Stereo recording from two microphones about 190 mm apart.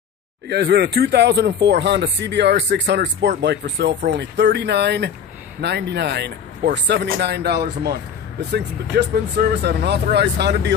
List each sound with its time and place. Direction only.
0.5 s speech: 60° right (ahead or behind)